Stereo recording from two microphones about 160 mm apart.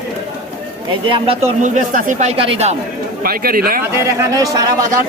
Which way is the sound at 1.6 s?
55° right (ahead or behind).